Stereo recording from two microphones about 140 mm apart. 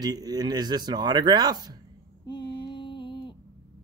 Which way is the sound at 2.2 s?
30° left (ahead or behind).